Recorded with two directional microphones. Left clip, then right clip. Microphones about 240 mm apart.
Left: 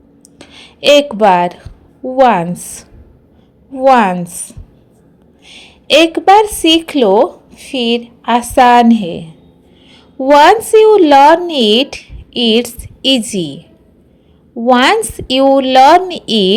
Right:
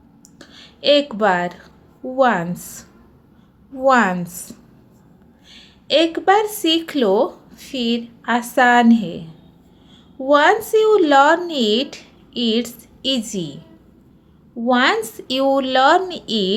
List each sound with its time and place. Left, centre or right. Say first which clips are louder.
0.3 s a woman's voice: left 7 dB; left